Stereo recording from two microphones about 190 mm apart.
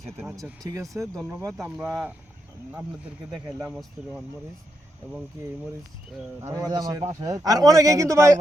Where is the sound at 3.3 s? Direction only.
15° right (ahead or behind).